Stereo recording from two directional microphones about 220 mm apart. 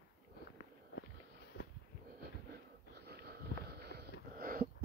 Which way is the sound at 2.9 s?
45° right (ahead or behind).